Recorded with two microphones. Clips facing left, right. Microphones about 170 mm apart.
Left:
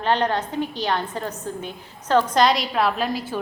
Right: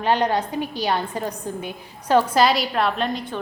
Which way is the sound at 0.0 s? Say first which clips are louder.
Right 1 dB; 10° right (ahead or behind).